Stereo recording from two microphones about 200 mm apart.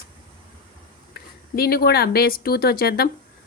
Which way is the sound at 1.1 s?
50° left (ahead or behind).